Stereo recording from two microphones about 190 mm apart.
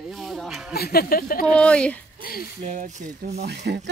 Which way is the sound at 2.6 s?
40° right (ahead or behind).